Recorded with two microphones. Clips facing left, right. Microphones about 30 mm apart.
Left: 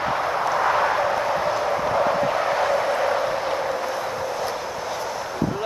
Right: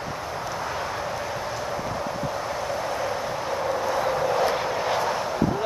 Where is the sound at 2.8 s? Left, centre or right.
Left.